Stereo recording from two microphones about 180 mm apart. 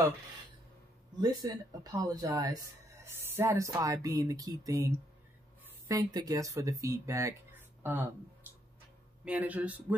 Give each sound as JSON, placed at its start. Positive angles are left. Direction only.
{"t": 1.4, "sound": "speech", "side_deg": -20}
{"t": 9.2, "sound": "speech", "side_deg": -10}